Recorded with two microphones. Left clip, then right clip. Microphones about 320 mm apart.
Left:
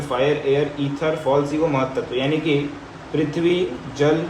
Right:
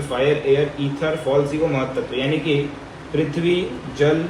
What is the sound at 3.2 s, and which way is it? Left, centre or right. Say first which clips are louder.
Speech: even; left.